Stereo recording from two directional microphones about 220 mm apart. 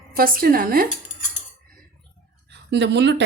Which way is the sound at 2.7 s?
50° right (ahead or behind).